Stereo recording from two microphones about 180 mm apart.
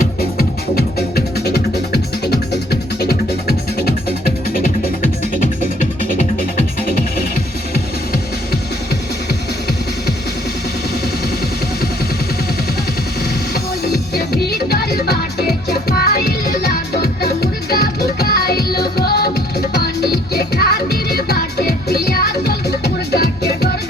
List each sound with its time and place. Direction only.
0.0 s music: 60° left (ahead or behind)
14.5 s music: 60° left (ahead or behind)